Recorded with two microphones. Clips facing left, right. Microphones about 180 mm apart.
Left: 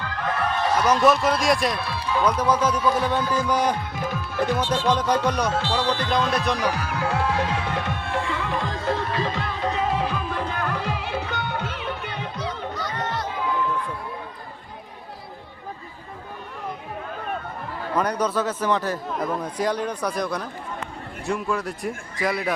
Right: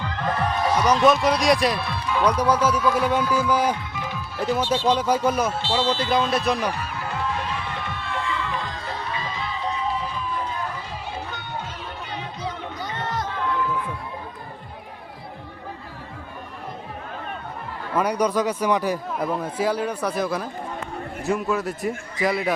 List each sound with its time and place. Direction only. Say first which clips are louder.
0.8 s a man's voice: right 1 dB; 5° left (ahead or behind)
2.4 s speech: right 1 dB; 10° right (ahead or behind)
3.9 s music: left 4 dB; 45° left (ahead or behind)
4.5 s speech: right 3 dB; 10° right (ahead or behind)
5.6 s speech: right 1 dB; 60° left (ahead or behind)
6.3 s speech: right 1 dB; 5° right (ahead or behind)
6.7 s music: left 4 dB; 85° left; by 9.0 s 50° left (ahead or behind)
9.1 s music: left 4 dB; 65° left (ahead or behind)
13.3 s music: even; 5° left (ahead or behind)
17.9 s speech: right 2 dB; 10° right (ahead or behind)
21.5 s speech: right 2 dB; centre (ahead or behind)